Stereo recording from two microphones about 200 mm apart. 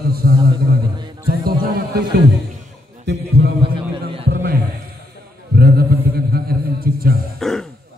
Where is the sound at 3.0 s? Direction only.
60° right (ahead or behind).